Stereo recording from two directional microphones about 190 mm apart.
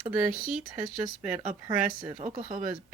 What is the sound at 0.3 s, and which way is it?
Speech, 45° right (ahead or behind).